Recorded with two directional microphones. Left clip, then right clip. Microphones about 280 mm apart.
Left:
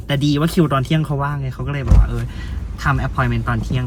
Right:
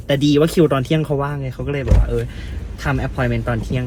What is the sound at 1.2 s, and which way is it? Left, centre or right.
Speech, right.